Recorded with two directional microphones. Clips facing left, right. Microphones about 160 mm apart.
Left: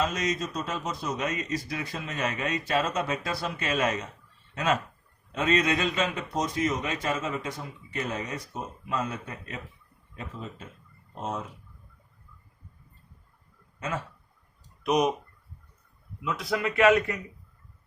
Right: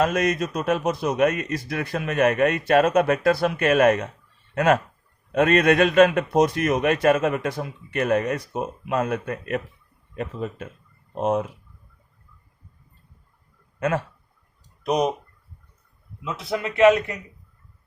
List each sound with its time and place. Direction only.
0.0 s a man's voice: 60° right (ahead or behind)
13.7 s speech: 65° right (ahead or behind)
14.8 s speech: 30° right (ahead or behind)
16.2 s a man's voice: 25° right (ahead or behind)